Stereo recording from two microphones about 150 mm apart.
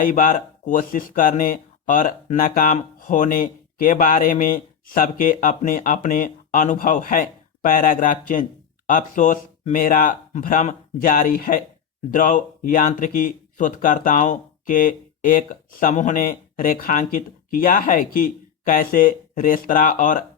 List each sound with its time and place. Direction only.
0.0 s speech: 65° left (ahead or behind)